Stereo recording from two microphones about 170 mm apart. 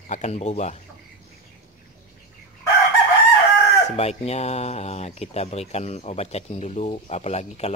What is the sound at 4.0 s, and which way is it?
Speech, 35° left (ahead or behind).